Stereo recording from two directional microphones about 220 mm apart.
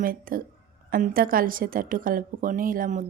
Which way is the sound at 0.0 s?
40° right (ahead or behind).